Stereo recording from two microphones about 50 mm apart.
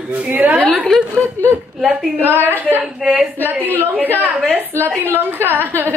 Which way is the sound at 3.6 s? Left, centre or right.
Right.